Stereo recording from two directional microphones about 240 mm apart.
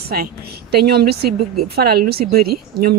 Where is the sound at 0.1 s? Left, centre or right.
Right.